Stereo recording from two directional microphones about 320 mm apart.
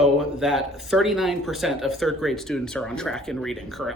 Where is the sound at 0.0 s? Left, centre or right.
Centre.